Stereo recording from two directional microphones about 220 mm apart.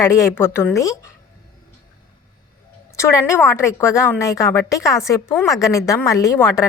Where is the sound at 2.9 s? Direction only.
15° left (ahead or behind).